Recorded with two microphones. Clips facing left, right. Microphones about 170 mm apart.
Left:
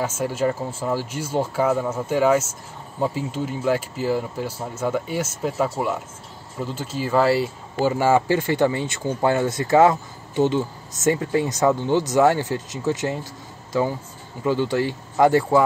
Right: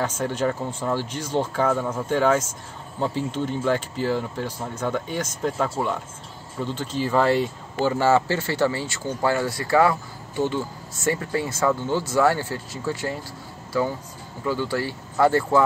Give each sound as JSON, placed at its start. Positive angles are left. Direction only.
{"t": 0.0, "sound": "speech", "side_deg": 5}